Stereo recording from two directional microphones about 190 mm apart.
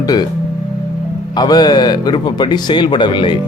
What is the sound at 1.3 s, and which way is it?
Speech, 20° left (ahead or behind).